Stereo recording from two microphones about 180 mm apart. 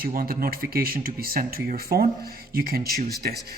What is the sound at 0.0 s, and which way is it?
Speech, 55° right (ahead or behind).